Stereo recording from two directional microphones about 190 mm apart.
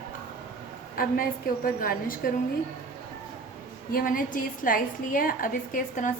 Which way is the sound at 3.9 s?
45° left (ahead or behind).